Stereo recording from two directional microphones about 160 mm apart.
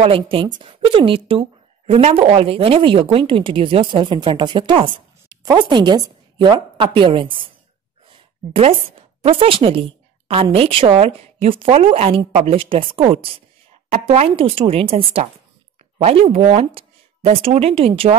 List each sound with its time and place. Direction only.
0.0 s a woman's voice: 35° right (ahead or behind)
8.1 s a sound: 35° right (ahead or behind)
9.2 s a woman's voice: 35° right (ahead or behind)
16.0 s speech: 35° right (ahead or behind)